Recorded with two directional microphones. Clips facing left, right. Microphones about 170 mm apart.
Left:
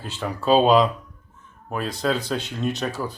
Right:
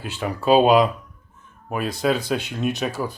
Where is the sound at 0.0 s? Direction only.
10° right (ahead or behind).